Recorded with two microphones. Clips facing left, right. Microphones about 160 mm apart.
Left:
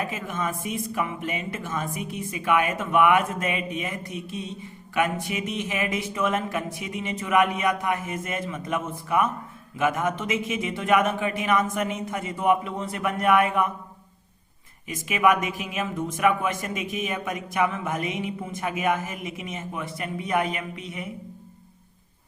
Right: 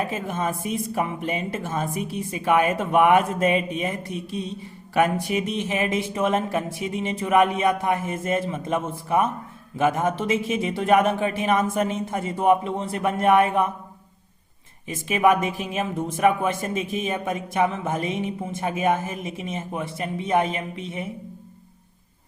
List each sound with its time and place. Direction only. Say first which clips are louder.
0.0 s speech: right 3 dB; 30° right (ahead or behind)
14.8 s a woman's voice: right 2 dB; 30° right (ahead or behind)